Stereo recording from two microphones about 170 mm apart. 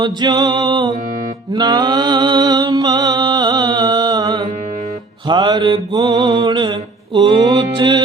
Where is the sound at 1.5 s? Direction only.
25° right (ahead or behind).